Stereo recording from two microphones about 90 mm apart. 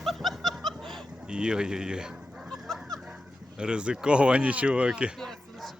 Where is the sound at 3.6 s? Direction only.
10° right (ahead or behind).